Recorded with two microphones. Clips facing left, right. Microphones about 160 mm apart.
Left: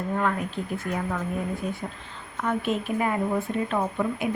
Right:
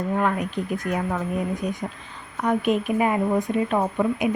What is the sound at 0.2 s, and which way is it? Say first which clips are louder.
A woman's voice: right 3 dB; 20° right (ahead or behind).